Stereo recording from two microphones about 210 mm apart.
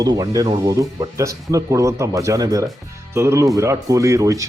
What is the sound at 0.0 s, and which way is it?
Speech, 15° right (ahead or behind).